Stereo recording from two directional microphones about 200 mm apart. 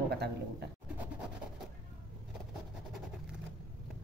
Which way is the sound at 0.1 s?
55° right (ahead or behind).